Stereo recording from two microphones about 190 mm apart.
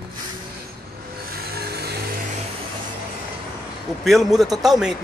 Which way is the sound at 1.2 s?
55° right (ahead or behind).